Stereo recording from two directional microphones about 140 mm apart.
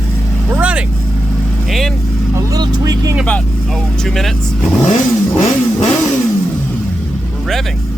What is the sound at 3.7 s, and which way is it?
Speech, centre (ahead or behind).